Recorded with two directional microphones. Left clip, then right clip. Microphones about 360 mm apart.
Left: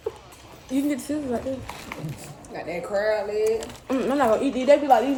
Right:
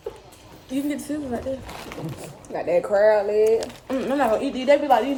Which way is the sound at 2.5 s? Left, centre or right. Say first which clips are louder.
Right 7 dB; centre.